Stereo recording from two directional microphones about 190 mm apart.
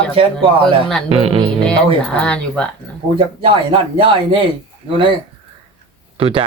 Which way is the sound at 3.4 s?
30° right (ahead or behind).